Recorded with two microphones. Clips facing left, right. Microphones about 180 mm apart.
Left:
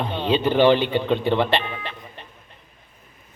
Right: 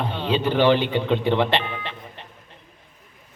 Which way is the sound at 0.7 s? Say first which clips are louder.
Left 1 dB; 15° right (ahead or behind).